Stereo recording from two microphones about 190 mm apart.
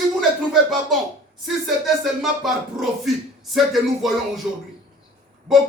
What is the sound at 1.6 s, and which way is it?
Speech, centre (ahead or behind).